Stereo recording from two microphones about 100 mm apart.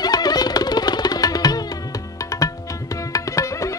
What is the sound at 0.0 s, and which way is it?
Music, 40° left (ahead or behind).